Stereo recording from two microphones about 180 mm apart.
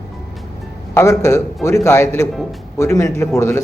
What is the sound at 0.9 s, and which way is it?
Speech, 15° left (ahead or behind).